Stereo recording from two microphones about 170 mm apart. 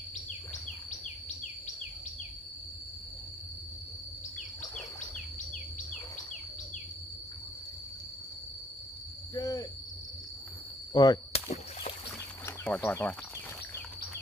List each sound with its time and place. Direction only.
9.3 s insect: 20° left (ahead or behind)
10.9 s cricket: 25° left (ahead or behind)
11.3 s a sound: 35° left (ahead or behind)
12.4 s speech: 10° left (ahead or behind)